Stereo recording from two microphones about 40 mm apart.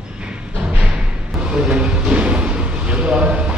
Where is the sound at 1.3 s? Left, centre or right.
Right.